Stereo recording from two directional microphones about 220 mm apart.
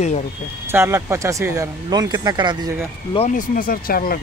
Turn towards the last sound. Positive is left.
turn(degrees=40)  # may be behind; listen again after turning